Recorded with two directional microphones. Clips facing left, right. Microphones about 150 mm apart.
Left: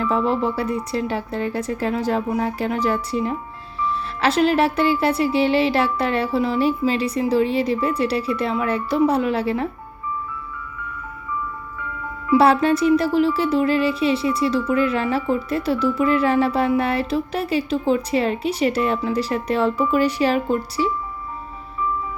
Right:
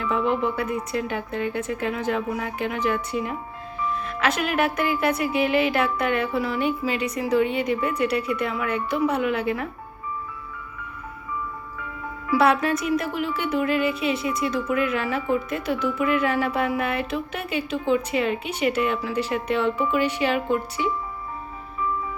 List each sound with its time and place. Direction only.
0.0 s speech: 35° left (ahead or behind)
12.3 s speech: 30° left (ahead or behind)